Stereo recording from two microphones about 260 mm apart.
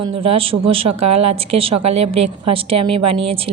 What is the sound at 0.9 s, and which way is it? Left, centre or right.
Speech, right.